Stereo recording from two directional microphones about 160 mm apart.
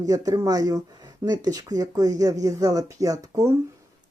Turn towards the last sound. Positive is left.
turn(degrees=-20)  # may be behind; listen again after turning